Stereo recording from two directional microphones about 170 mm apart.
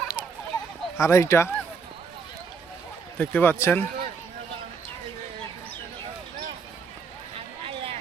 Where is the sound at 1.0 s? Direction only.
15° left (ahead or behind).